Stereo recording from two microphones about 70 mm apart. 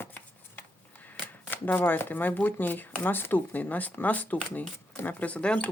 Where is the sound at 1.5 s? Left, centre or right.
Left.